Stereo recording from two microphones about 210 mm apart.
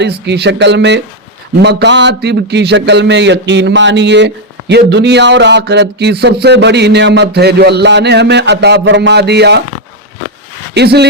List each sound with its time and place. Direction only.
0.0 s a man's voice: 55° right (ahead or behind)
10.8 s speech: 50° right (ahead or behind)